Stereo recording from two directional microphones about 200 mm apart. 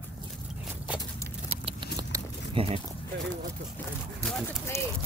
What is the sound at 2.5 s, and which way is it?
Speech, 25° right (ahead or behind).